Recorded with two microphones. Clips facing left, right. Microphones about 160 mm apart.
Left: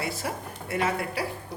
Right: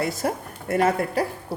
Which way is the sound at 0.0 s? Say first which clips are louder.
Right 6 dB; 50° right (ahead or behind).